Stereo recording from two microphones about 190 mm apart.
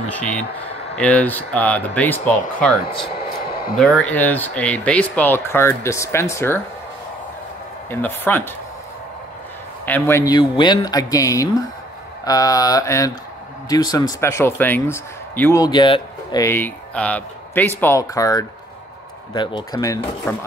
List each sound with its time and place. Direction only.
0.1 s speech: 5° left (ahead or behind)
7.9 s speech: 10° left (ahead or behind)
9.8 s speech: 10° left (ahead or behind)